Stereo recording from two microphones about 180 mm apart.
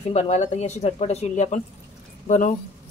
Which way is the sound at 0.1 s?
40° left (ahead or behind).